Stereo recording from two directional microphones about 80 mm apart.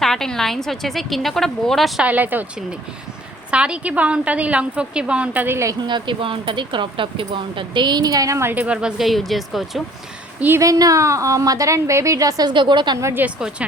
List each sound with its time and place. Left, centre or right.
0.0 s a woman's voice: centre
2.0 s speech: right
3.5 s a woman's voice: centre
5.8 s speech: right
8.4 s speech: right
8.6 s a woman's voice: centre
9.0 s a woman's voice: centre
10.6 s a woman's voice: right
12.5 s a woman's voice: right
13.2 s speech: right